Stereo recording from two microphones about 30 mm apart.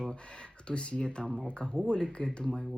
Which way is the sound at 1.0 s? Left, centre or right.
Left.